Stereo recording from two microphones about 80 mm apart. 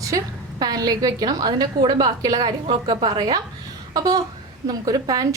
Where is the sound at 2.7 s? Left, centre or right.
Right.